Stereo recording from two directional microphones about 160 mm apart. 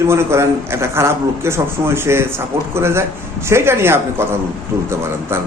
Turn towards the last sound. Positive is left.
turn(degrees=-15)  # may be behind; listen again after turning